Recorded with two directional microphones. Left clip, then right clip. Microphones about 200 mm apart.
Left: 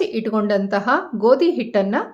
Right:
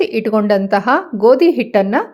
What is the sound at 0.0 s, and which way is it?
A woman's voice, 30° right (ahead or behind).